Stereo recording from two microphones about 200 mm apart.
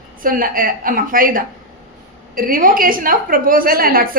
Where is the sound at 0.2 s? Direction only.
45° right (ahead or behind).